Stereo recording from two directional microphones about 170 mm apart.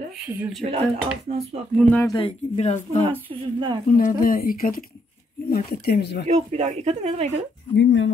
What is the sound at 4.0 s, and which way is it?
Speech, 55° left (ahead or behind).